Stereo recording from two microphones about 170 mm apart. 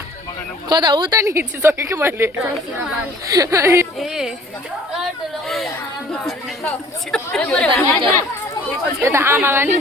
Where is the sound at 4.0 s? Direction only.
5° right (ahead or behind).